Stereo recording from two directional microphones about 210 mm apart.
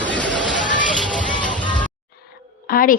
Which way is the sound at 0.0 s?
5° left (ahead or behind).